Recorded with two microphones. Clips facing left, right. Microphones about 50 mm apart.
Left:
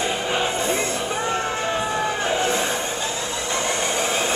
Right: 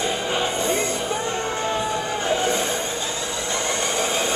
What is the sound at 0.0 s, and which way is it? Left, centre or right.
Music, centre.